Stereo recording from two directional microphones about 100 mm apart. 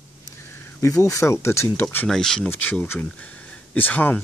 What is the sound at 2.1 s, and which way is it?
Speech, 5° left (ahead or behind).